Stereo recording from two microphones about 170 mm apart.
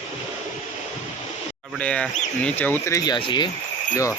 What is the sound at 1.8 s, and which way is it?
Speech, 5° left (ahead or behind).